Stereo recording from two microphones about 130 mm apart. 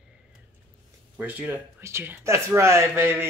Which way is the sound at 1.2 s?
15° right (ahead or behind).